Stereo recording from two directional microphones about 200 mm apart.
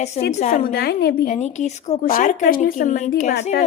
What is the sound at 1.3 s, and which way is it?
A woman's voice, 35° left (ahead or behind).